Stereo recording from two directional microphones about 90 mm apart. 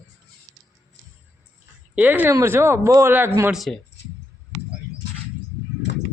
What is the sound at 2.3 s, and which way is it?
Speech, 30° right (ahead or behind).